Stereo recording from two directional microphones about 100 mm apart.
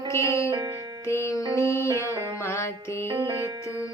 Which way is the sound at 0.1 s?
30° left (ahead or behind).